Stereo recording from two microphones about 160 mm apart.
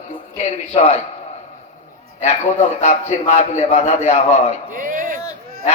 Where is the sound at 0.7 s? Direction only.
40° left (ahead or behind).